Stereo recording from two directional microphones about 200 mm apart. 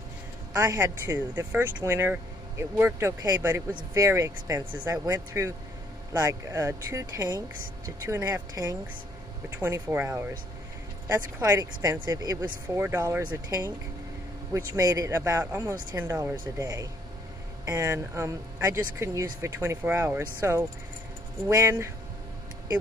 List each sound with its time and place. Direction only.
0.5 s speech: 15° right (ahead or behind)